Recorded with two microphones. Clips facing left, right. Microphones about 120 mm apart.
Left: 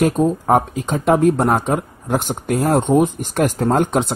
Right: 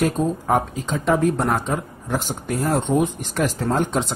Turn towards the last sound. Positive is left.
turn(degrees=55)  # may be behind; listen again after turning